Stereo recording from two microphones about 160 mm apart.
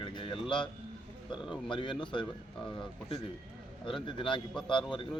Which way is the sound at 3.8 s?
30° left (ahead or behind).